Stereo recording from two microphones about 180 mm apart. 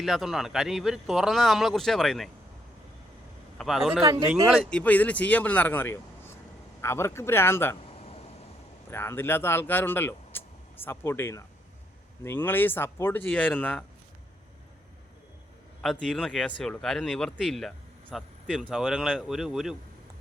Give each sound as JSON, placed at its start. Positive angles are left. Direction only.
{"t": 0.0, "sound": "speech", "side_deg": 0}
{"t": 3.6, "sound": "speech", "side_deg": 0}
{"t": 4.0, "sound": "speech", "side_deg": -15}
{"t": 4.4, "sound": "speech", "side_deg": 10}
{"t": 8.9, "sound": "speech", "side_deg": 15}
{"t": 15.8, "sound": "speech", "side_deg": 0}